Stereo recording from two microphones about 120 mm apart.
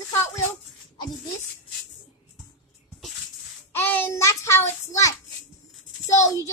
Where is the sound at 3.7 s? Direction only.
15° left (ahead or behind).